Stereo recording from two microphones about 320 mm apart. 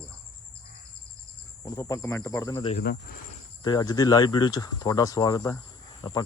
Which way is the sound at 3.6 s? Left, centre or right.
Centre.